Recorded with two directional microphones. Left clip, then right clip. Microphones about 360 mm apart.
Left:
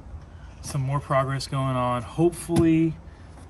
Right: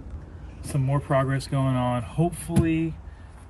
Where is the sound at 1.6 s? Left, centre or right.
Centre.